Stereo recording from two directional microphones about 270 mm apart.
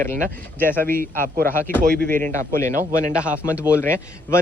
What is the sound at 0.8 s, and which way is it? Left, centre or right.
A man's voice, right.